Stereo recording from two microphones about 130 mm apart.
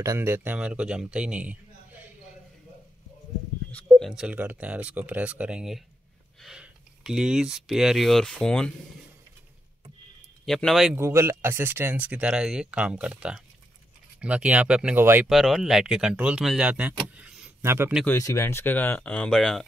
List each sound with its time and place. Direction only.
0.0 s speech: 20° right (ahead or behind)
4.1 s speech: 10° right (ahead or behind)
10.4 s speech: centre (ahead or behind)
11.0 s speech: 20° right (ahead or behind)
15.2 s speech: centre (ahead or behind); by 17.9 s 20° right (ahead or behind)
18.1 s speech: 20° left (ahead or behind); by 19.6 s 5° left (ahead or behind)